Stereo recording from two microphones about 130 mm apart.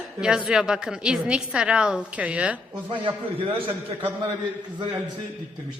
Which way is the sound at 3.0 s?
45° right (ahead or behind).